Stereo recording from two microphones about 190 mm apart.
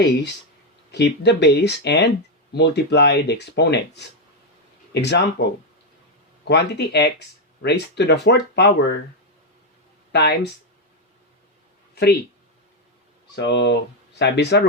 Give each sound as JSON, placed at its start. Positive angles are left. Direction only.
{"t": 0.9, "sound": "speech", "side_deg": 60}
{"t": 6.5, "sound": "speech", "side_deg": 65}
{"t": 10.1, "sound": "speech", "side_deg": 60}
{"t": 13.3, "sound": "speech", "side_deg": 65}